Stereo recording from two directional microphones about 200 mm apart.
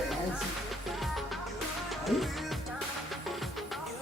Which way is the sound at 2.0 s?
Centre (ahead or behind).